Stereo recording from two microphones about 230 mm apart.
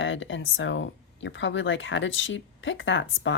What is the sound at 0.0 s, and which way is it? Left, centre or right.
Speech, left.